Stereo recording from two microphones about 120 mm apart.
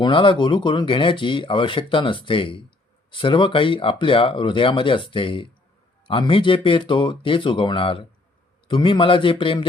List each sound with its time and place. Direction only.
0.0 s speech: 45° left (ahead or behind)